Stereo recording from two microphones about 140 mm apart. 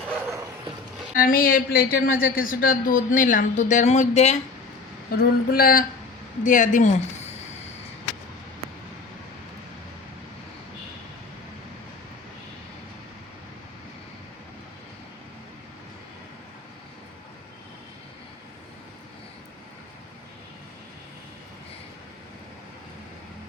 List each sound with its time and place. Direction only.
1.1 s a woman's voice: 90° left; by 4.4 s 55° left (ahead or behind)
5.1 s a sound: 90° left
6.4 s speech: 65° left (ahead or behind)